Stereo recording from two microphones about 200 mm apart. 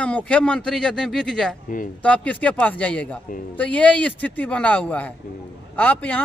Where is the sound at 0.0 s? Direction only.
5° left (ahead or behind).